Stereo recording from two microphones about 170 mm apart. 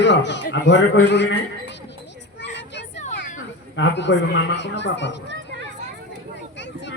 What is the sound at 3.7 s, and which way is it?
A man's voice, 90° left.